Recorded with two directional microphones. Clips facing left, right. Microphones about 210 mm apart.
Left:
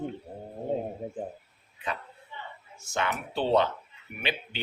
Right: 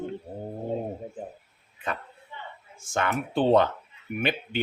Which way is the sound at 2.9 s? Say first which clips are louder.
Right 3 dB; 50° right (ahead or behind).